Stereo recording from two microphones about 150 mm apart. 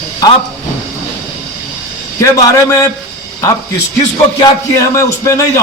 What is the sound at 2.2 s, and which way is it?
Speech, 20° left (ahead or behind).